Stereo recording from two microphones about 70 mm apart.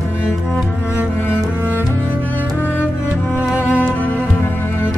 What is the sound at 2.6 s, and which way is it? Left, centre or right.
Music, left.